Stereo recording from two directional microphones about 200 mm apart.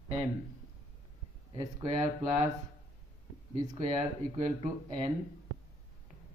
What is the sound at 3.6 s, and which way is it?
Speech, 35° right (ahead or behind).